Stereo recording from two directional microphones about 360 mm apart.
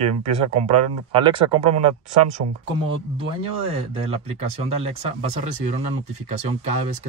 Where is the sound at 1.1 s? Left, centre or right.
Centre.